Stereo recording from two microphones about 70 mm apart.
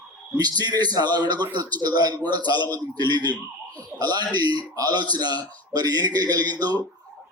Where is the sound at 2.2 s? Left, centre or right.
Right.